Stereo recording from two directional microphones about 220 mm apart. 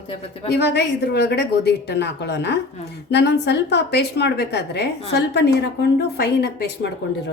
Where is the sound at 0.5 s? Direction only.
50° left (ahead or behind).